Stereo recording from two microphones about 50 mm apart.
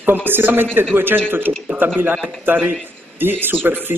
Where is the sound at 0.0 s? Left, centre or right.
Right.